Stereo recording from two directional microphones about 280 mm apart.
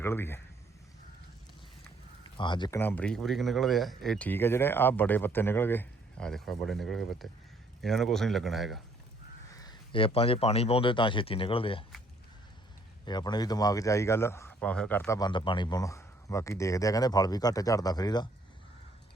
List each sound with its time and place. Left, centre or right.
0.0 s a man's voice: centre
2.2 s a man's voice: centre
9.5 s speech: centre
13.1 s a man's voice: centre